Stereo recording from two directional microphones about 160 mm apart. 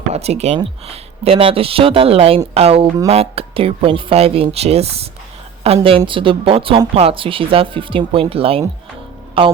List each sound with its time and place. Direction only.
0.1 s speech: 40° right (ahead or behind)